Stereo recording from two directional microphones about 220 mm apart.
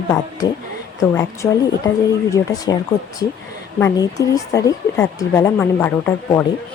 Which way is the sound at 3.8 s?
15° left (ahead or behind).